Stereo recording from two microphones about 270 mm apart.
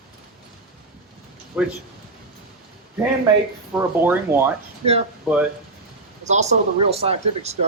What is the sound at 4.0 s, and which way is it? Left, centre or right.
Speech, centre.